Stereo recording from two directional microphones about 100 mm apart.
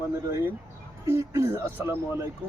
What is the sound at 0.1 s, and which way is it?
Speech, 25° right (ahead or behind).